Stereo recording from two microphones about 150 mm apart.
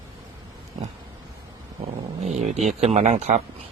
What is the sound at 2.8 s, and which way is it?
Speech, 50° right (ahead or behind).